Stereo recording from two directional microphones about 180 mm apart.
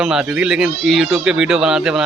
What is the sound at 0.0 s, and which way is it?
Speech, 5° right (ahead or behind).